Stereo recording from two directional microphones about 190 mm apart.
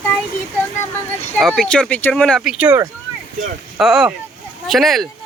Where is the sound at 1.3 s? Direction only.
Centre (ahead or behind).